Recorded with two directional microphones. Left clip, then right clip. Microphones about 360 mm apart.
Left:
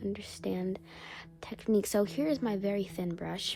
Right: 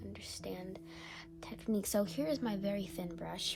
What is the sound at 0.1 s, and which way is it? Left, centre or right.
A woman's voice, left.